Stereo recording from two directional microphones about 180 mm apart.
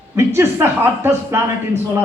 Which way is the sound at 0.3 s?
15° right (ahead or behind).